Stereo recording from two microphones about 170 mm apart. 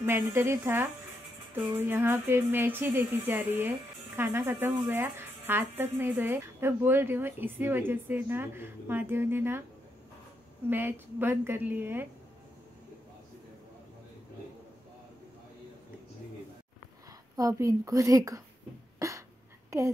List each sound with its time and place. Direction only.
0.0 s speech: 15° right (ahead or behind)
10.7 s speech: 10° right (ahead or behind)
17.4 s a woman's voice: 20° right (ahead or behind)
18.9 s a sound: 20° right (ahead or behind)
19.7 s a woman's voice: 20° right (ahead or behind)